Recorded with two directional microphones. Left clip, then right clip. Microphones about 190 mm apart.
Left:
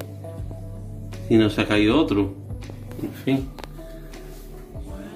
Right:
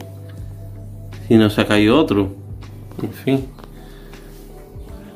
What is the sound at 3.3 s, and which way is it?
Speech, 20° right (ahead or behind).